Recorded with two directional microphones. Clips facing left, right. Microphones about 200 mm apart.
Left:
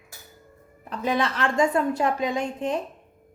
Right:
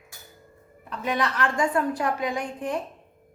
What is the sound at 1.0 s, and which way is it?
A woman's voice, 30° left (ahead or behind).